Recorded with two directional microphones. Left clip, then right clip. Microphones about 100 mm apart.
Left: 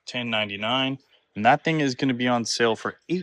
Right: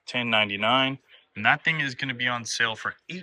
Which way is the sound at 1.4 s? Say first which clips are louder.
Left 3 dB; 80° left.